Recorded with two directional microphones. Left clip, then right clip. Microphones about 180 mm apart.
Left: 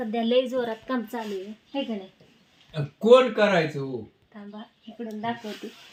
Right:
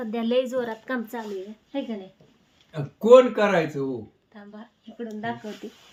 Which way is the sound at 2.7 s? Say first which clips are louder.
Right 2 dB; centre (ahead or behind).